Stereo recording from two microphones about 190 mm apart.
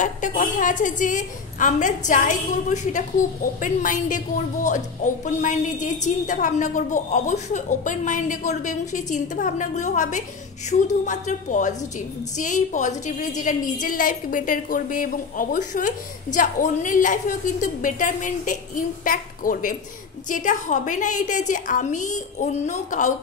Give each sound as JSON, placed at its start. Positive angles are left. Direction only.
{"t": 0.0, "sound": "a woman's voice", "side_deg": 40}